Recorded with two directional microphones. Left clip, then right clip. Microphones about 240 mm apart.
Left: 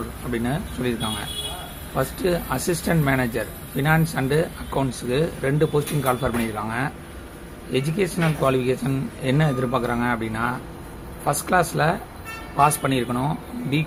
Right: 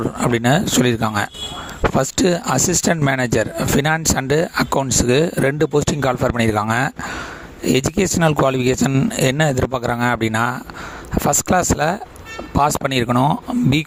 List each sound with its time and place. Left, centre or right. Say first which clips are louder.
0.3 s speech: right 10 dB; right